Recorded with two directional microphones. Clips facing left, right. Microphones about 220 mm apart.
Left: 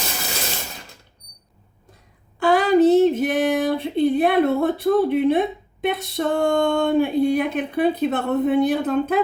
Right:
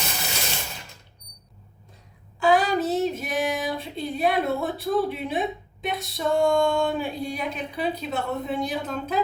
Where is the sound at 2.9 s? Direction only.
55° left (ahead or behind).